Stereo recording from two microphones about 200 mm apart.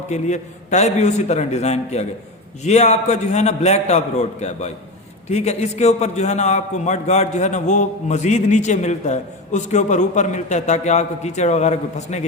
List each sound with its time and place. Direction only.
0.1 s a man's voice: 35° left (ahead or behind)